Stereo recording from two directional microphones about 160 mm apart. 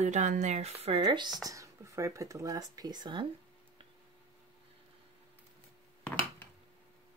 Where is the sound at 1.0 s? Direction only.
25° right (ahead or behind).